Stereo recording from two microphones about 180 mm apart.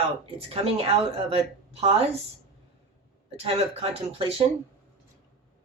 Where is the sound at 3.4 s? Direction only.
35° right (ahead or behind).